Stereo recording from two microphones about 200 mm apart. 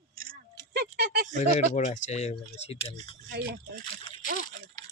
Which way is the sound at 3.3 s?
50° right (ahead or behind).